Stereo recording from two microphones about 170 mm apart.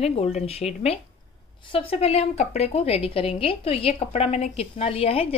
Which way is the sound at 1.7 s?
35° left (ahead or behind).